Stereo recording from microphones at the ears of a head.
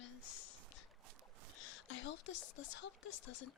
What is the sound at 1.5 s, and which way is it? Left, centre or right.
Speech, left.